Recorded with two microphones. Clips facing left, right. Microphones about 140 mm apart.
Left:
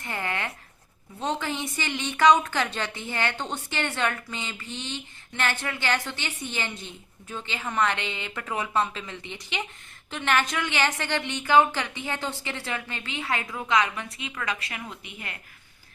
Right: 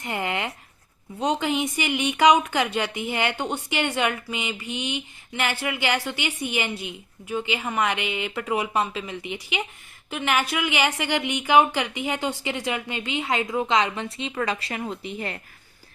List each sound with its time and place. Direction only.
0.0 s speech: 20° right (ahead or behind)